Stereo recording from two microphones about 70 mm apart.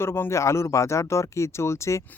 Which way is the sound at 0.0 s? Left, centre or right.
Left.